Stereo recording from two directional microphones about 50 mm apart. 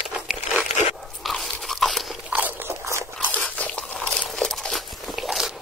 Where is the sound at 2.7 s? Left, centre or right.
Right.